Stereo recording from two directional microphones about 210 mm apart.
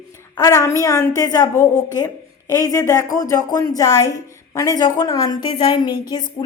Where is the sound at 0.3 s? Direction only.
15° left (ahead or behind).